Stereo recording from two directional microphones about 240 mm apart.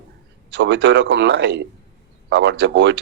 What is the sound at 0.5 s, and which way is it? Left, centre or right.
Speech, right.